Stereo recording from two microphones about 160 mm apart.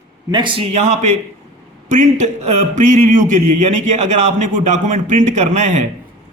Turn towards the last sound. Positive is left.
turn(degrees=-45)  # may be behind; listen again after turning